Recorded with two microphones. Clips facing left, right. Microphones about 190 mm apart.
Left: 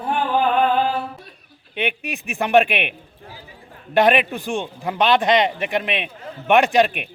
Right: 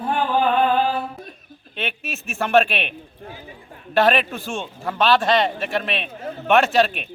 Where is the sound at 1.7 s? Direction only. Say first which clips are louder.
Left 4 dB; 15° left (ahead or behind).